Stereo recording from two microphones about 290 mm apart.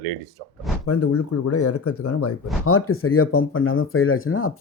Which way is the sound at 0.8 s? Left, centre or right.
Left.